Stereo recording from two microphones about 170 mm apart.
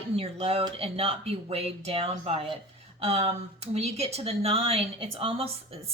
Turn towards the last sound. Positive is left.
turn(degrees=-35)  # may be behind; listen again after turning